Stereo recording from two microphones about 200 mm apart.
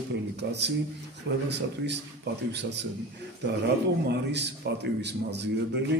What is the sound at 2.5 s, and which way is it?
Speech, 60° right (ahead or behind).